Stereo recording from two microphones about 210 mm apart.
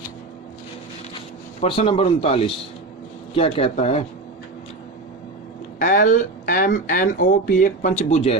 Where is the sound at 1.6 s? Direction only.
25° left (ahead or behind).